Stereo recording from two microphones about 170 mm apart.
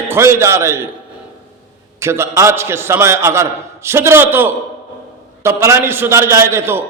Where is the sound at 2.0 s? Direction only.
15° right (ahead or behind).